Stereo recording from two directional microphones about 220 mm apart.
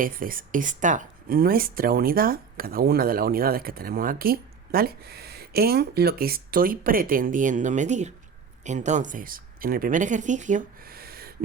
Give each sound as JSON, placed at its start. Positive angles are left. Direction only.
{"t": 0.0, "sound": "speech", "side_deg": -40}